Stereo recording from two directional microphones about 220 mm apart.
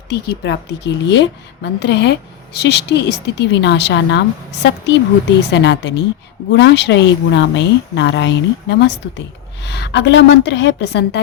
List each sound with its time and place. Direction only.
0.1 s a woman's voice: 50° left (ahead or behind)